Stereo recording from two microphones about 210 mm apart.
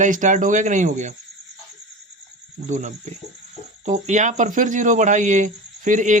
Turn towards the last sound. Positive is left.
turn(degrees=-35)  # may be behind; listen again after turning